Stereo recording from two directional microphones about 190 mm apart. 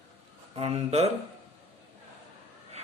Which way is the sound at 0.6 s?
35° right (ahead or behind).